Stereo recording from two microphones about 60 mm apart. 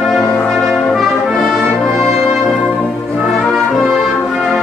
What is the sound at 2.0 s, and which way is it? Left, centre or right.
Music, centre.